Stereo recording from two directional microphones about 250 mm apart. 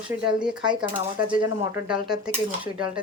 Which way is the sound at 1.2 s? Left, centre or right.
Centre.